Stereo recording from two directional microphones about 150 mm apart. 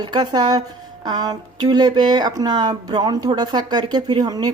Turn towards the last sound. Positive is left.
turn(degrees=-25)  # may be behind; listen again after turning